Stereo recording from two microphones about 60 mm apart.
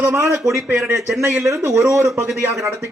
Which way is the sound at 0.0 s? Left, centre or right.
Right.